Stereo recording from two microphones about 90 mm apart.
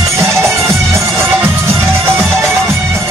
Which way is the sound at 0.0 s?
30° right (ahead or behind).